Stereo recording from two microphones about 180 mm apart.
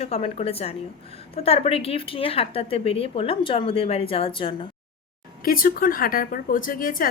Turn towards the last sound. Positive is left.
turn(degrees=50)  # may be behind; listen again after turning